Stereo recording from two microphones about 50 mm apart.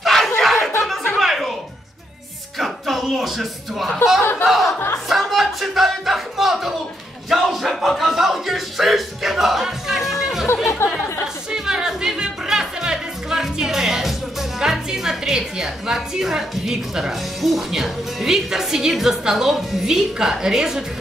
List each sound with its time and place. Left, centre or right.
0.0 s a sound: centre
1.2 s music: centre
2.6 s music: centre
4.2 s a sound: left
4.5 s music: centre
7.2 s a sound: centre
8.0 s music: centre
10.5 s chatter: left
11.5 s music: centre
14.6 s a woman's voice: centre